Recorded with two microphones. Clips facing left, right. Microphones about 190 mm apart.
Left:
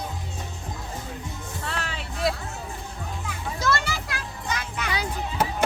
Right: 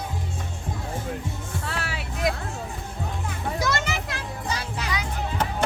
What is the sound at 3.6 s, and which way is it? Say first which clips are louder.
Music: left 2 dB; 20° right (ahead or behind).